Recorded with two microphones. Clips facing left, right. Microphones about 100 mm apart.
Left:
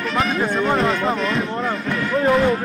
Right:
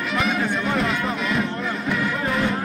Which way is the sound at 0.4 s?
35° left (ahead or behind).